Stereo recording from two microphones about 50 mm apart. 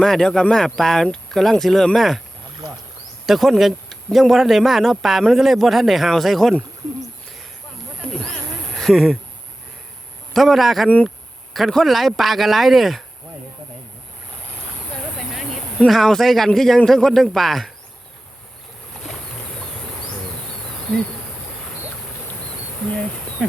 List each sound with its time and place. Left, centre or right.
0.0 s speech: centre
3.2 s speech: centre
8.0 s speech: centre
8.7 s a sound: centre
10.3 s speech: centre
15.9 s speech: centre